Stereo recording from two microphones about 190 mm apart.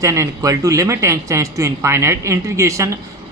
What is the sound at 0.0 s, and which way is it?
Speech, 15° right (ahead or behind).